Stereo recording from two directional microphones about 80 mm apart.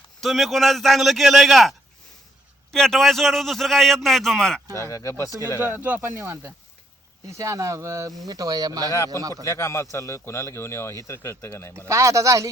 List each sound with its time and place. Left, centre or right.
0.2 s a man's voice: centre
2.7 s a man's voice: centre
4.7 s speech: left
5.6 s speech: right
6.1 s speech: right
8.3 s speech: right
9.3 s speech: left
11.9 s speech: right